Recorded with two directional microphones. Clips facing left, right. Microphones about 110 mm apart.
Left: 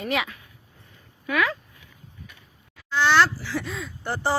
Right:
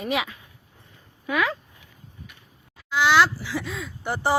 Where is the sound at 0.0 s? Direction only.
15° right (ahead or behind).